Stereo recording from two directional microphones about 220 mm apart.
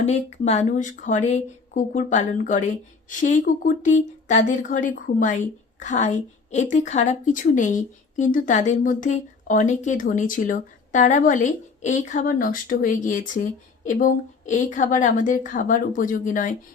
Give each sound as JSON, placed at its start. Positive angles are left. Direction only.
{"t": 0.0, "sound": "speech", "side_deg": 30}